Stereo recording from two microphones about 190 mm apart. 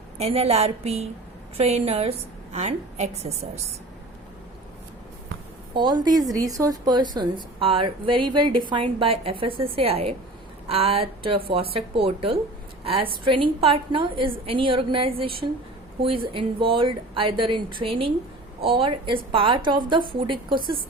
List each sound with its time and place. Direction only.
0.2 s a woman's voice: 30° right (ahead or behind)
5.7 s a woman's voice: 25° right (ahead or behind)